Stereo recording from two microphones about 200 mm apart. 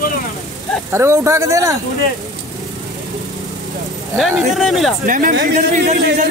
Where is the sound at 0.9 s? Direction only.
15° right (ahead or behind).